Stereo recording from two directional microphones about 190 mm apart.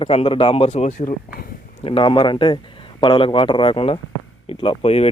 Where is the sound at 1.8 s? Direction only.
30° left (ahead or behind).